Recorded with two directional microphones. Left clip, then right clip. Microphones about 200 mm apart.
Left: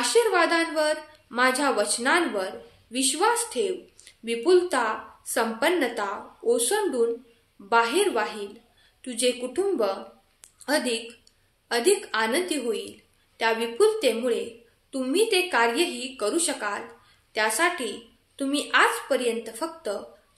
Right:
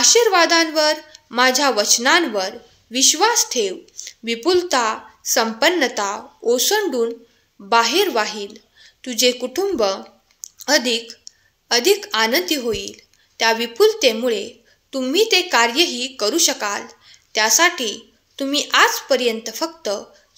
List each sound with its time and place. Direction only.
0.0 s a woman's voice: 40° right (ahead or behind)